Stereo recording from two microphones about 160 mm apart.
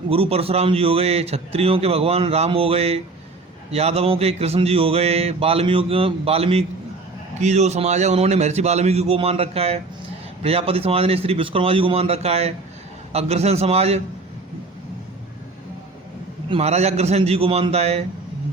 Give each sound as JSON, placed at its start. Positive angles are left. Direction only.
{"t": 0.1, "sound": "a man's voice", "side_deg": -35}
{"t": 16.5, "sound": "speech", "side_deg": -40}